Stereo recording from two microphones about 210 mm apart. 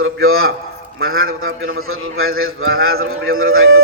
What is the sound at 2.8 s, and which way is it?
Music, 80° right.